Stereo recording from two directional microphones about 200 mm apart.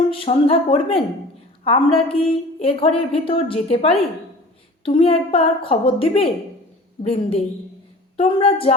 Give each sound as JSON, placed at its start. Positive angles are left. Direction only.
{"t": 0.1, "sound": "a woman's voice", "side_deg": 30}